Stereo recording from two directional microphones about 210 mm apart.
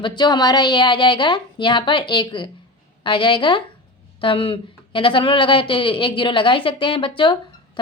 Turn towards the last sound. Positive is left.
turn(degrees=25)  # may be behind; listen again after turning